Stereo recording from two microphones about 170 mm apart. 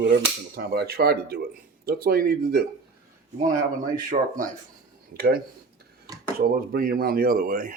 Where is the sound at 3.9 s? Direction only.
50° right (ahead or behind).